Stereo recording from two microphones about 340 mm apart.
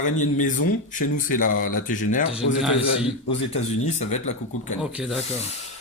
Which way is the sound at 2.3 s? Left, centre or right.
Centre.